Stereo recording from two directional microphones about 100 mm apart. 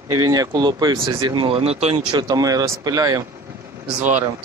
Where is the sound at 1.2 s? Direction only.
50° right (ahead or behind).